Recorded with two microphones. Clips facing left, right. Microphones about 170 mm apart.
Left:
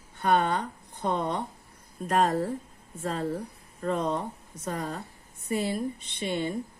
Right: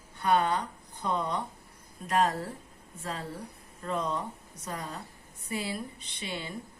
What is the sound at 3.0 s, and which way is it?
Speech, 50° left (ahead or behind).